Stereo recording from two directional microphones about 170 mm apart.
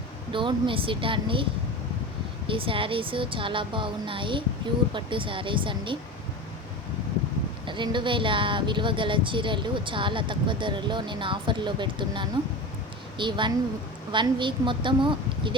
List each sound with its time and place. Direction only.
0.3 s a woman's voice: 30° right (ahead or behind)
2.5 s a woman's voice: 30° right (ahead or behind)
7.6 s speech: 30° right (ahead or behind)